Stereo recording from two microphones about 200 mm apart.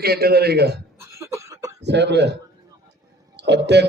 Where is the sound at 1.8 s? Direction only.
60° right (ahead or behind).